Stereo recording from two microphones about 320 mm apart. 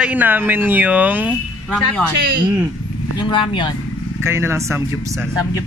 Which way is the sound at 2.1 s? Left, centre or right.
Right.